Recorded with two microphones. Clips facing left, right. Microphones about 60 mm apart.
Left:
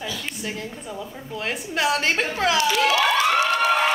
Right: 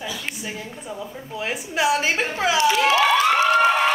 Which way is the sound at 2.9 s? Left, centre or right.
Right.